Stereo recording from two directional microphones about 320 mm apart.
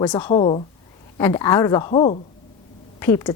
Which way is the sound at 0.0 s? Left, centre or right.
Centre.